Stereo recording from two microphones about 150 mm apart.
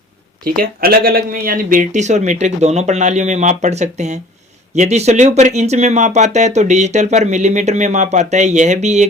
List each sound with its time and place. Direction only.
0.4 s speech: 80° right; by 9.0 s 50° right (ahead or behind)